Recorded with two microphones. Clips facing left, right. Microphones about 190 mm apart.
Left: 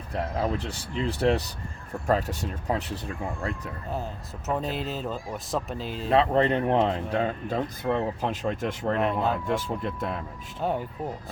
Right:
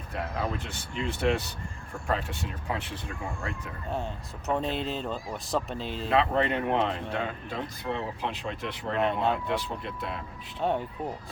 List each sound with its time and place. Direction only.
0.6 s speech: 35° left (ahead or behind)
3.8 s speech: centre (ahead or behind)
6.1 s speech: 35° left (ahead or behind)
9.0 s speech: centre (ahead or behind)
9.5 s speech: 45° left (ahead or behind)
10.6 s speech: centre (ahead or behind)